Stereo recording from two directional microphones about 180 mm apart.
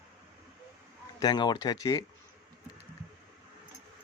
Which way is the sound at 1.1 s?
25° left (ahead or behind).